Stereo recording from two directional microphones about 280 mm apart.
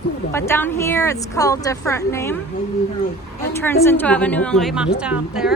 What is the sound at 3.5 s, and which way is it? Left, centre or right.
A woman's voice, centre.